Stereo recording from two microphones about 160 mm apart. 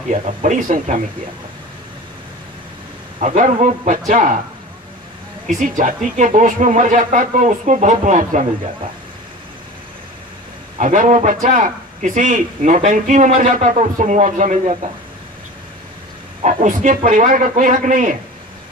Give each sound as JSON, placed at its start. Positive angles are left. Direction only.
{"t": 0.1, "sound": "a man's voice", "side_deg": -50}
{"t": 3.2, "sound": "a man's voice", "side_deg": -50}
{"t": 5.5, "sound": "a man's voice", "side_deg": -55}
{"t": 10.8, "sound": "a man's voice", "side_deg": -50}
{"t": 16.4, "sound": "a man's voice", "side_deg": -50}